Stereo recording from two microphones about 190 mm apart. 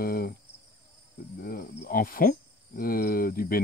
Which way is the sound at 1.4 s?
55° left (ahead or behind).